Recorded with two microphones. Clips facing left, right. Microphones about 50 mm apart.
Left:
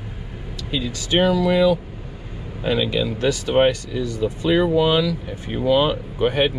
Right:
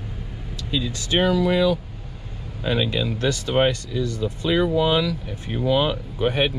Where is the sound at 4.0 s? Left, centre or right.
Left.